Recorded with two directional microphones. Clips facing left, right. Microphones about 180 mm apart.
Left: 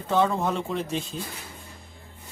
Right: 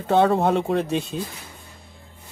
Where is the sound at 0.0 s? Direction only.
65° right (ahead or behind).